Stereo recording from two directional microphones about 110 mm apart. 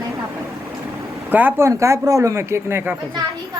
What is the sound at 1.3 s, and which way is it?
Speech, 15° right (ahead or behind).